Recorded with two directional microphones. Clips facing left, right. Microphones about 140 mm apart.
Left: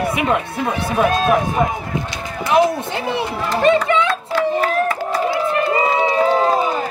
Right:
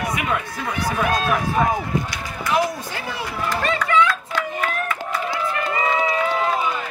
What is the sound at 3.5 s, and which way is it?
Run, 25° left (ahead or behind).